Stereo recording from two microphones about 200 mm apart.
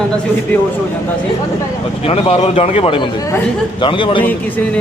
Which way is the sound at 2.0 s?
30° left (ahead or behind).